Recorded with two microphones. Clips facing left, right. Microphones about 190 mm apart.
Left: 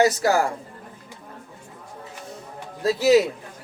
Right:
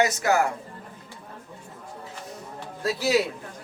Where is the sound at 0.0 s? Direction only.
35° left (ahead or behind).